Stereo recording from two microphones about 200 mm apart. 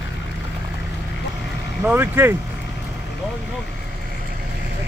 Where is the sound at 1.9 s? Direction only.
10° right (ahead or behind).